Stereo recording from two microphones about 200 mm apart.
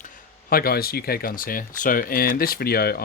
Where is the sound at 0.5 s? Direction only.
50° left (ahead or behind).